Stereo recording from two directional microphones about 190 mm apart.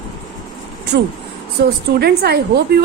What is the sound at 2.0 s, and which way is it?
Speech, 55° right (ahead or behind).